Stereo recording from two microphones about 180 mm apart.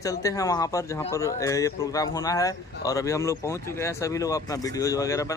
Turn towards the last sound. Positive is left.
turn(degrees=20)  # may be behind; listen again after turning